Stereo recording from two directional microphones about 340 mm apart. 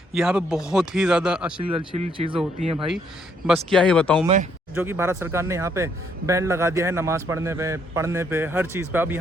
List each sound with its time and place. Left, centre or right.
0.1 s speech: centre
1.7 s speech: centre
2.7 s speech: centre
4.7 s speech: centre